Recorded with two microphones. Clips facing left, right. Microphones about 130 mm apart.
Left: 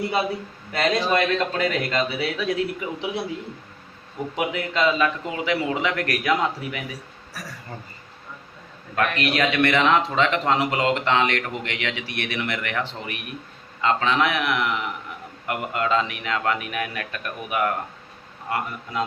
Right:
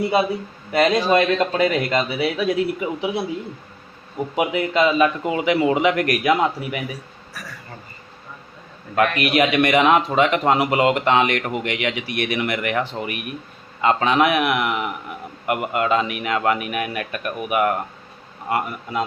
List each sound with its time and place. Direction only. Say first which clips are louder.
0.7 s a man's voice: right 5 dB; 10° right (ahead or behind)
4.4 s a man's voice: right 5 dB; 10° right (ahead or behind)
9.0 s a man's voice: right 5 dB; 10° right (ahead or behind)